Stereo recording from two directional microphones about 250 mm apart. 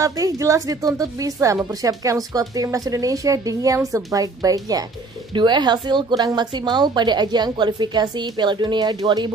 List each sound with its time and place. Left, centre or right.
0.0 s speech: centre